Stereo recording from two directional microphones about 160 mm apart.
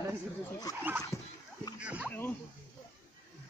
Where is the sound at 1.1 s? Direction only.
15° left (ahead or behind).